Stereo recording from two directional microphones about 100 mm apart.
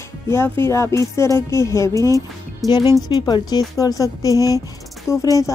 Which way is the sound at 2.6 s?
Centre (ahead or behind).